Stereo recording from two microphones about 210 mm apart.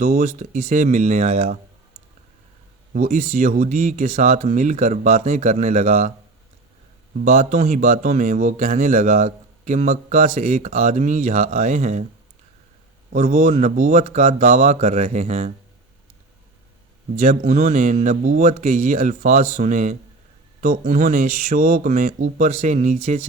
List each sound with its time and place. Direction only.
0.0 s speech: 40° right (ahead or behind)
2.9 s speech: 40° right (ahead or behind)
7.2 s speech: 35° right (ahead or behind)
13.1 s speech: 35° right (ahead or behind)
17.2 s speech: 35° right (ahead or behind)